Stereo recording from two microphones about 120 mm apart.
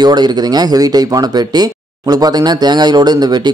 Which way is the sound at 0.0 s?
35° right (ahead or behind).